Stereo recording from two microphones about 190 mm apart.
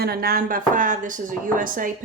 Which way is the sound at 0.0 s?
55° right (ahead or behind).